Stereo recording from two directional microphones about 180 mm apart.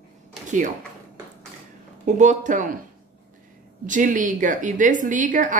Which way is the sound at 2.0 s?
45° right (ahead or behind).